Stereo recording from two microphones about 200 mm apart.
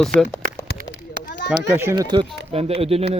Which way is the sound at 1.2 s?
60° left (ahead or behind).